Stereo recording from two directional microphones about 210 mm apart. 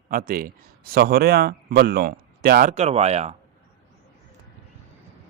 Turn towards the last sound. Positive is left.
turn(degrees=-30)  # may be behind; listen again after turning